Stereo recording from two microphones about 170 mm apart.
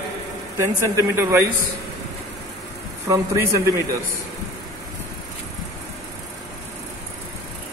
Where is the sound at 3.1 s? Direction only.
20° right (ahead or behind).